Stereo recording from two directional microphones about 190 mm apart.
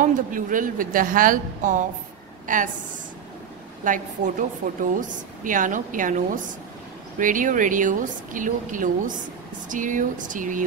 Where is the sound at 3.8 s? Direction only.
45° right (ahead or behind).